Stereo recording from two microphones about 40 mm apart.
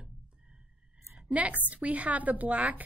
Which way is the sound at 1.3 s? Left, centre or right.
Right.